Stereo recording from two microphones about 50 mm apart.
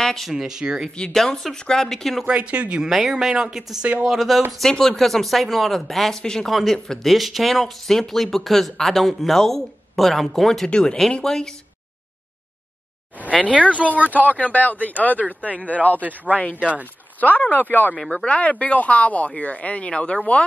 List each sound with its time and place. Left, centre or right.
0.0 s speech: centre
0.3 s speech: centre
1.1 s speech: centre
2.2 s speech: right
2.8 s speech: centre
10.7 s speech: centre
13.5 s speech: right
14.3 s speech: left
16.0 s speech: right
16.8 s speech: left
18.1 s speech: left